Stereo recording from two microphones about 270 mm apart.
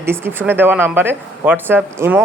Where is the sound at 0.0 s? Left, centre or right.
Centre.